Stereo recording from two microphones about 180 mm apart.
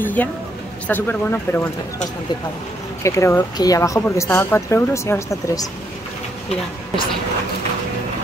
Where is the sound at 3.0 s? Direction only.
15° left (ahead or behind).